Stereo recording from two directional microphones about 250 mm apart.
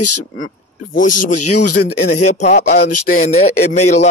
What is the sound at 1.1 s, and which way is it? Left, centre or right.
Speech, left.